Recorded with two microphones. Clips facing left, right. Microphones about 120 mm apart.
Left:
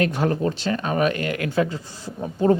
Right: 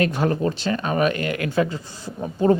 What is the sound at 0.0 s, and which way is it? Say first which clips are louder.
Speech: right 1 dB; 15° right (ahead or behind).